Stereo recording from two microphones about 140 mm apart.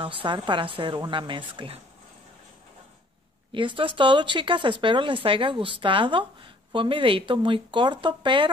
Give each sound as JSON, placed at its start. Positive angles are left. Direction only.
{"t": 0.0, "sound": "speech", "side_deg": -40}
{"t": 3.5, "sound": "speech", "side_deg": -35}